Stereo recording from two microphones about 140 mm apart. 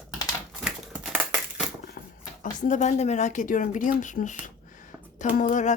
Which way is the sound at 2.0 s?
90° left.